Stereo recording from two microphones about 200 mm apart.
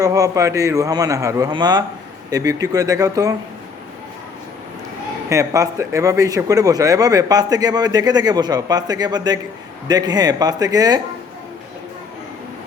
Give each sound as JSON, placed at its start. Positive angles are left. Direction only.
{"t": 0.0, "sound": "a man's voice", "side_deg": -15}
{"t": 5.3, "sound": "speech", "side_deg": -15}